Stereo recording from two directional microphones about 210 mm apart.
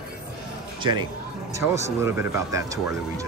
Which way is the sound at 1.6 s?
10° right (ahead or behind).